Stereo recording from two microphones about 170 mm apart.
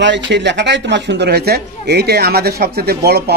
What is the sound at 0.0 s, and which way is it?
A man's voice, 90° right.